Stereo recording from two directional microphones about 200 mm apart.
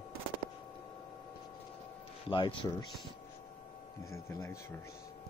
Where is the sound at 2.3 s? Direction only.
25° left (ahead or behind).